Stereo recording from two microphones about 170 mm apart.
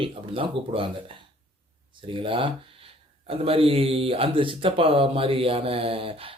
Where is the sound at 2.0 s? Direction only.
30° right (ahead or behind).